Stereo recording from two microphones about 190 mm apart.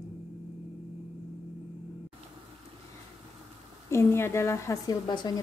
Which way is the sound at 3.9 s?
15° left (ahead or behind).